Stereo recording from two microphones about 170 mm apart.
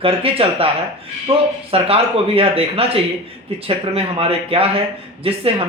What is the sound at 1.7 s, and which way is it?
Speech, 35° right (ahead or behind).